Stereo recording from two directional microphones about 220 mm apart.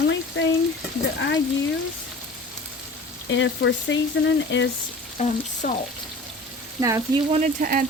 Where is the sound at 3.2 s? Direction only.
55° left (ahead or behind).